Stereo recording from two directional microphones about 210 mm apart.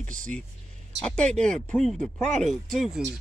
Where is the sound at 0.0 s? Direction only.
40° right (ahead or behind).